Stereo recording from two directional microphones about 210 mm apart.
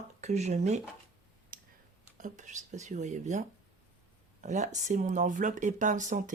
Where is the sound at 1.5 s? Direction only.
40° right (ahead or behind).